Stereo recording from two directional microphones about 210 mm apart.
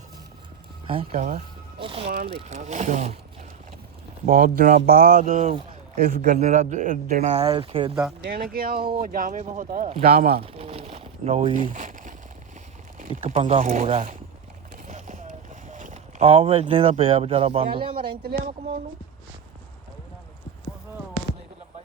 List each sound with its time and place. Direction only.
0.9 s speech: 30° right (ahead or behind)
2.0 s speech: 50° right (ahead or behind)
2.3 s speech: 35° right (ahead or behind)
4.3 s speech: 40° right (ahead or behind); by 7.9 s 25° right (ahead or behind)
8.2 s speech: 50° right (ahead or behind)
9.9 s speech: 30° right (ahead or behind)
14.8 s a sound: 35° right (ahead or behind)
15.6 s speech: 35° right (ahead or behind)
18.0 s speech: 50° right (ahead or behind)